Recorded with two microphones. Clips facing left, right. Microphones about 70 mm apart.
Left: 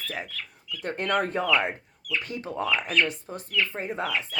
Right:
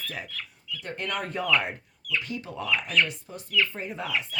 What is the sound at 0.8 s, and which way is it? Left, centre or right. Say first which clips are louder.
A woman's voice: left 6 dB; left.